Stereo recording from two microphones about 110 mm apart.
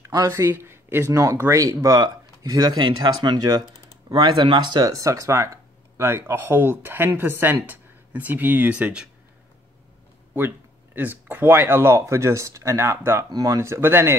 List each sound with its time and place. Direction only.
0.3 s speech: 20° right (ahead or behind)
11.0 s speech: 15° right (ahead or behind)
13.3 s speech: 35° right (ahead or behind)